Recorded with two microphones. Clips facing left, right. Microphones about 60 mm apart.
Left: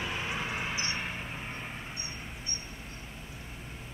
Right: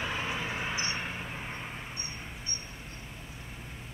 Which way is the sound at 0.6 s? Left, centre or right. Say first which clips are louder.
Right 1 dB; right.